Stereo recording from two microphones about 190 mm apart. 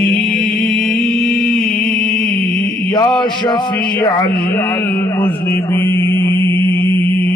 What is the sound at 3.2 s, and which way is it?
Speech, 25° left (ahead or behind).